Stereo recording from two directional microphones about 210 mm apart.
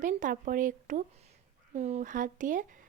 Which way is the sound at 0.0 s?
35° right (ahead or behind).